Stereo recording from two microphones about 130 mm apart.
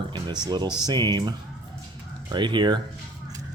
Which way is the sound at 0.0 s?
35° right (ahead or behind).